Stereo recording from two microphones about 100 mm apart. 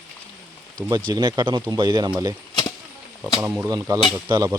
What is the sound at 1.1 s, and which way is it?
Speech, 45° right (ahead or behind).